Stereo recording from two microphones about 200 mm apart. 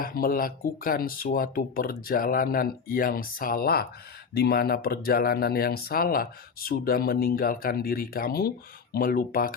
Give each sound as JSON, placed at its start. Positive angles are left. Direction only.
{"t": 0.0, "sound": "speech", "side_deg": 45}